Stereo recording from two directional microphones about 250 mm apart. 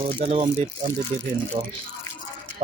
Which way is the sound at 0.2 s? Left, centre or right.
Centre.